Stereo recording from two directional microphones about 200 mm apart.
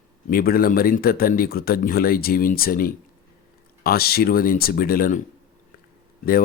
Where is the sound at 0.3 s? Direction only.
45° left (ahead or behind).